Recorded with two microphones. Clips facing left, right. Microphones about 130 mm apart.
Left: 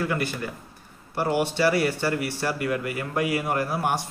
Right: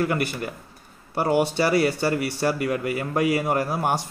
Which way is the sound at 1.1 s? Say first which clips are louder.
Right 3 dB; 25° right (ahead or behind).